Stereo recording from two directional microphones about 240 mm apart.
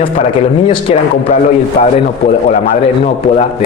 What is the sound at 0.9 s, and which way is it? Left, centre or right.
Speech, left.